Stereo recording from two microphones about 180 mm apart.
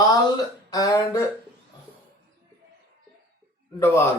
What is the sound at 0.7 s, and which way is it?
Speech, 20° left (ahead or behind).